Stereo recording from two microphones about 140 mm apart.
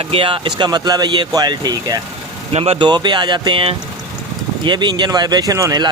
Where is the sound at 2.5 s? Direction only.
45° right (ahead or behind).